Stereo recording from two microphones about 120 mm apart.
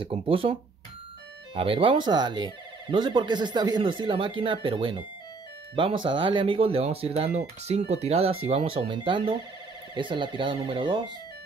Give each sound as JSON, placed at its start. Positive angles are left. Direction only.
{"t": 0.0, "sound": "speech", "side_deg": -45}